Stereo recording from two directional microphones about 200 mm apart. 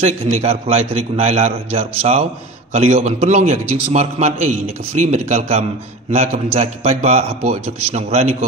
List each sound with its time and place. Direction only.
0.0 s a man's voice: 35° right (ahead or behind)